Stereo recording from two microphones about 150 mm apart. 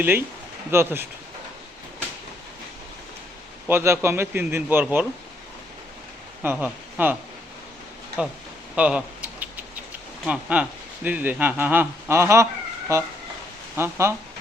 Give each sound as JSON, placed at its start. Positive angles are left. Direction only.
{"t": 0.7, "sound": "speech", "side_deg": -15}
{"t": 3.7, "sound": "speech", "side_deg": -15}
{"t": 6.4, "sound": "speech", "side_deg": -10}
{"t": 8.2, "sound": "speech", "side_deg": -5}
{"t": 8.7, "sound": "a sound", "side_deg": -5}
{"t": 10.2, "sound": "speech", "side_deg": -10}
{"t": 12.9, "sound": "a sound", "side_deg": -20}
{"t": 13.7, "sound": "speech", "side_deg": -15}